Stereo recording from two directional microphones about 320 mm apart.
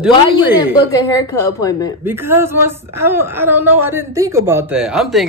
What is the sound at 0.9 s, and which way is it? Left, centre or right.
Speech, centre.